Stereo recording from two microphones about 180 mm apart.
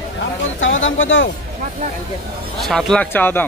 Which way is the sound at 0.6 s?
90° left.